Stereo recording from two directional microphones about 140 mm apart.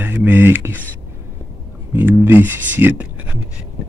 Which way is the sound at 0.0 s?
15° right (ahead or behind).